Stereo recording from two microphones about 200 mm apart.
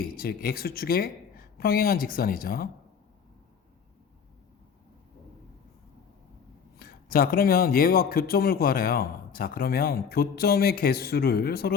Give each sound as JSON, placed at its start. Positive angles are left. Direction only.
{"t": 0.2, "sound": "speech", "side_deg": 50}
{"t": 6.7, "sound": "speech", "side_deg": 50}